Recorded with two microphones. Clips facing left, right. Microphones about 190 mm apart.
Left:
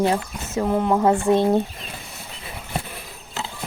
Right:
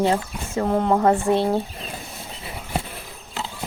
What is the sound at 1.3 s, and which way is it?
Speech, 15° left (ahead or behind).